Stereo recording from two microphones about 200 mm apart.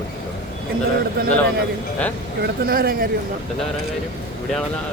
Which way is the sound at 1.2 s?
45° right (ahead or behind).